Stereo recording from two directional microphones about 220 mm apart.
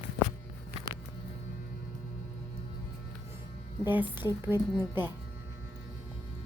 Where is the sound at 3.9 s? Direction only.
10° right (ahead or behind).